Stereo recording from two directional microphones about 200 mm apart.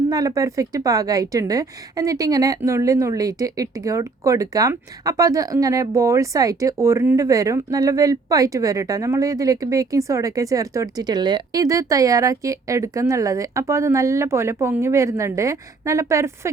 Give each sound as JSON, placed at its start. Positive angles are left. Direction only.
{"t": 0.1, "sound": "a woman's voice", "side_deg": -15}